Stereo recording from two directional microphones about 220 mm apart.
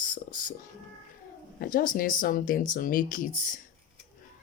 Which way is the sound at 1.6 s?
40° left (ahead or behind).